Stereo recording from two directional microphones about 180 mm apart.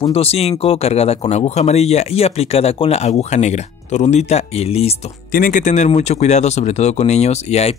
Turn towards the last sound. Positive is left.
turn(degrees=35)  # may be behind; listen again after turning